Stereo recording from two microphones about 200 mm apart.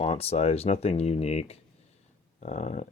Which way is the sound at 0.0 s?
30° left (ahead or behind).